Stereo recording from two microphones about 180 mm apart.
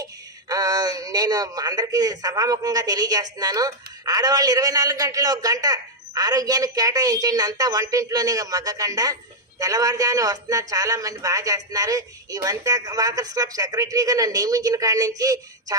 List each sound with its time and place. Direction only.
0.0 s a man's voice: 20° right (ahead or behind)